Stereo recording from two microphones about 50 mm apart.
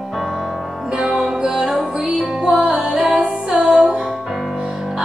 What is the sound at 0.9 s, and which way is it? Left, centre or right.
Music, centre.